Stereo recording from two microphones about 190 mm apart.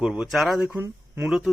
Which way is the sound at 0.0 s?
5° right (ahead or behind).